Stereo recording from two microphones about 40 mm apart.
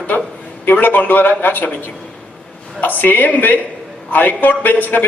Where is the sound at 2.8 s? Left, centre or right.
Left.